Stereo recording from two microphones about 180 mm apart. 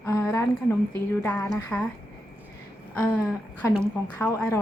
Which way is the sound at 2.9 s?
10° left (ahead or behind).